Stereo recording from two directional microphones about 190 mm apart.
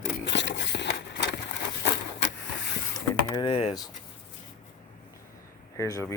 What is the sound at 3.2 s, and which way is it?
Typing, 25° left (ahead or behind).